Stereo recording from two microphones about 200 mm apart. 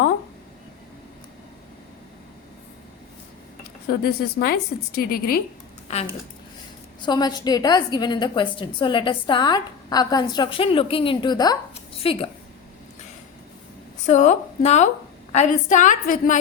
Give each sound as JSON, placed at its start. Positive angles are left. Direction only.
{"t": 4.0, "sound": "a woman's voice", "side_deg": 50}
{"t": 5.9, "sound": "a woman's voice", "side_deg": 30}
{"t": 7.0, "sound": "a woman's voice", "side_deg": 20}
{"t": 14.1, "sound": "a woman's voice", "side_deg": 35}